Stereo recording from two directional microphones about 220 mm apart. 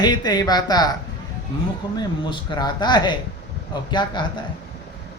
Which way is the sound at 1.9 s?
20° left (ahead or behind).